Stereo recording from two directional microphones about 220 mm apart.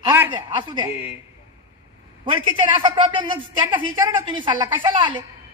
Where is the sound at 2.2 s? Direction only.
20° right (ahead or behind).